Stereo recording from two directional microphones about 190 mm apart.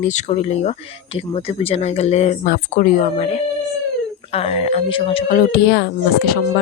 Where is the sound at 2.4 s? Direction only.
50° left (ahead or behind).